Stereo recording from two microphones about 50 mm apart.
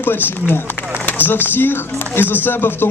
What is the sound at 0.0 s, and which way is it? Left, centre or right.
Speech, left.